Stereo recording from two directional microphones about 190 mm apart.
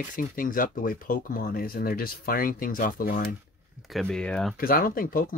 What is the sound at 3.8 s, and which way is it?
Speech, centre (ahead or behind).